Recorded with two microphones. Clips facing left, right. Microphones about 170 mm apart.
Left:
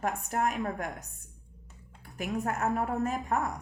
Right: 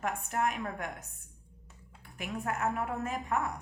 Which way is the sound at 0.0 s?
35° left (ahead or behind).